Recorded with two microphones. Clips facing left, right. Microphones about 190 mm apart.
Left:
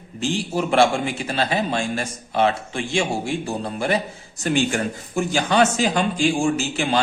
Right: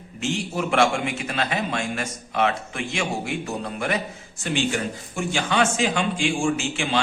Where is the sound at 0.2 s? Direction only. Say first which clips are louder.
Left 3 dB; 35° left (ahead or behind).